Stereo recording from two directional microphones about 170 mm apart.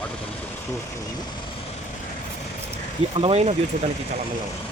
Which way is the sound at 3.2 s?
35° right (ahead or behind).